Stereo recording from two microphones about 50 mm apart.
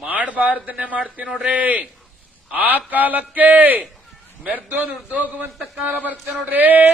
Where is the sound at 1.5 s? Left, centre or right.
Right.